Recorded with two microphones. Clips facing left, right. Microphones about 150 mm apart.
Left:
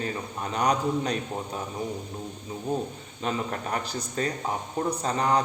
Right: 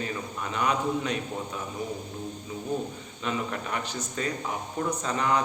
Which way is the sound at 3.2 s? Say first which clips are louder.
Left 2 dB; 40° left (ahead or behind).